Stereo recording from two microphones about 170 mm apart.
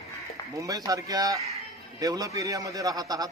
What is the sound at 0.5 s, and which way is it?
A man's voice, 20° right (ahead or behind).